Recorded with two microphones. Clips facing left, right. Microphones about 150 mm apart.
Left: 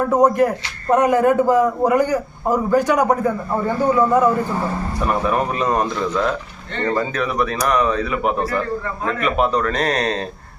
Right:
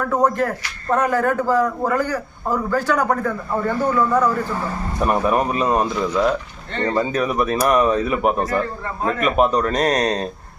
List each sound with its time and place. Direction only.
0.0 s a man's voice: 20° left (ahead or behind)
4.9 s speech: 10° right (ahead or behind)
6.9 s speech: 15° right (ahead or behind)
9.2 s speech: 15° right (ahead or behind)